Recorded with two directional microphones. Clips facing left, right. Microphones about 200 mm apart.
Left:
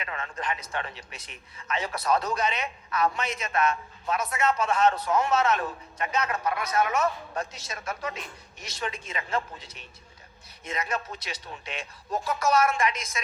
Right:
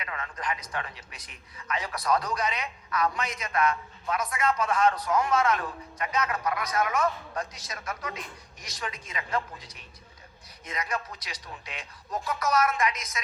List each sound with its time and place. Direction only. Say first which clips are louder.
0.0 s a man's voice: left 1 dB; 25° left (ahead or behind)